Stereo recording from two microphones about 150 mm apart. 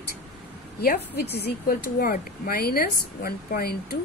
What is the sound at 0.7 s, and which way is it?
Speech, 90° left.